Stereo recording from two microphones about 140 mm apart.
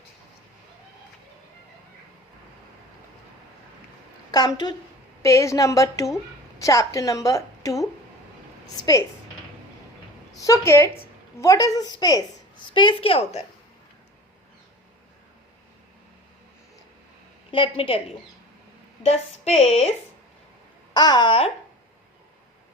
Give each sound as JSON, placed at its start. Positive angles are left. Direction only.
{"t": 4.3, "sound": "a woman's voice", "side_deg": 30}
{"t": 10.4, "sound": "a woman's voice", "side_deg": 20}
{"t": 17.5, "sound": "a woman's voice", "side_deg": 40}
{"t": 19.0, "sound": "speech", "side_deg": 50}
{"t": 20.9, "sound": "a woman's voice", "side_deg": 30}